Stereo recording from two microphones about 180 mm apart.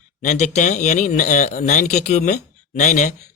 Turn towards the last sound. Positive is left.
turn(degrees=40)  # may be behind; listen again after turning